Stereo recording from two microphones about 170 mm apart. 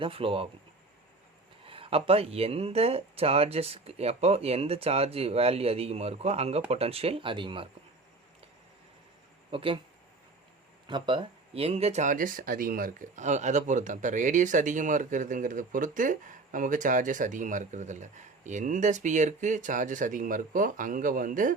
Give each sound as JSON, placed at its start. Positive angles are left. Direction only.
{"t": 0.0, "sound": "speech", "side_deg": -35}
{"t": 1.6, "sound": "speech", "side_deg": -35}
{"t": 9.5, "sound": "speech", "side_deg": -30}
{"t": 10.8, "sound": "speech", "side_deg": -25}